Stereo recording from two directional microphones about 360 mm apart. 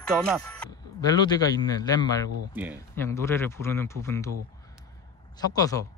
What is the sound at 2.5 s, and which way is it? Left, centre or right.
Speech, centre.